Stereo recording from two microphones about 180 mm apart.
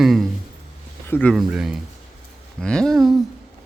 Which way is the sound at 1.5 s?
5° right (ahead or behind).